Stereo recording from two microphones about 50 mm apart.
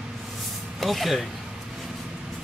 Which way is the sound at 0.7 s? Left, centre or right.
Centre.